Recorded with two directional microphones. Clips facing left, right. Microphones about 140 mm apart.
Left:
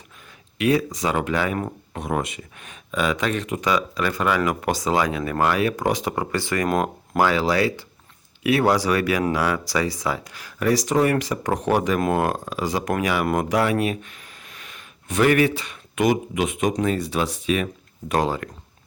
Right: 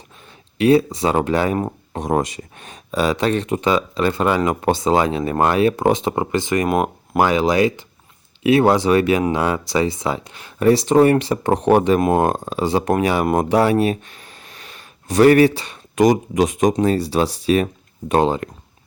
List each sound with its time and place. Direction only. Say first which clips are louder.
0.6 s speech: right 6 dB; 30° right (ahead or behind)